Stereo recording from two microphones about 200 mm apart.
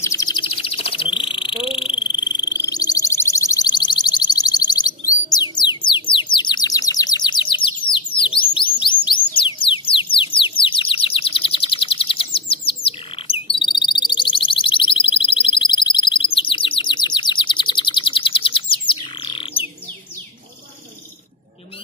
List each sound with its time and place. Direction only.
0.0 s bird: 15° left (ahead or behind)
5.6 s music: 25° left (ahead or behind)
6.3 s bird: 20° left (ahead or behind)
9.4 s music: 25° left (ahead or behind)
13.3 s a sound: 25° left (ahead or behind)